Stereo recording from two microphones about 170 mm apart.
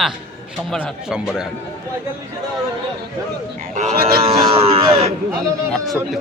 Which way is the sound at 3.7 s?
45° right (ahead or behind).